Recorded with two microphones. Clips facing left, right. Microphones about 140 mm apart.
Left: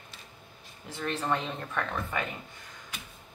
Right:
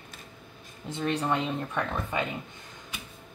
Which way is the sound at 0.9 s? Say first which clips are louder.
Right 3 dB; 15° right (ahead or behind).